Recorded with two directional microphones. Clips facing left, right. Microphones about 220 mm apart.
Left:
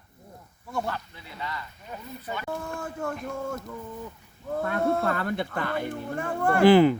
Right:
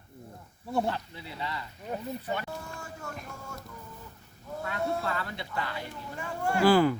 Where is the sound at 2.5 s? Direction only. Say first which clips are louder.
Left 7 dB; 55° left (ahead or behind).